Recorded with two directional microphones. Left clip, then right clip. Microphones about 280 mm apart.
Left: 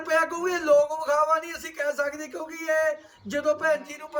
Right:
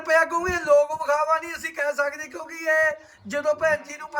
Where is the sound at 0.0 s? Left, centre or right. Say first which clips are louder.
Right 4 dB; centre.